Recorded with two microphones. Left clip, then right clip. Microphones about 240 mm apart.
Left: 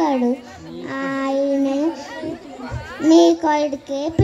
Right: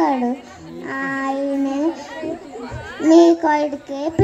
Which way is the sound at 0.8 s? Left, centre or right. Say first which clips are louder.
Right 1 dB; left.